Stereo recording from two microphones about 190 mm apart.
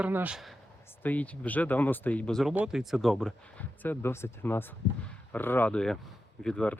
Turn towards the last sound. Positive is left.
turn(degrees=5)  # may be behind; listen again after turning